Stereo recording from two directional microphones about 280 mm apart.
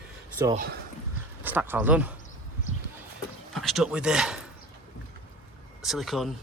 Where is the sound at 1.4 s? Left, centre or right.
Centre.